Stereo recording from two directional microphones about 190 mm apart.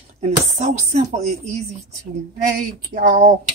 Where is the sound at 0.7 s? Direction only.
35° right (ahead or behind).